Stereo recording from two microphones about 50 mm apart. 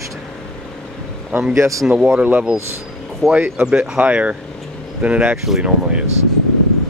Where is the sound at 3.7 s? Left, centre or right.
Right.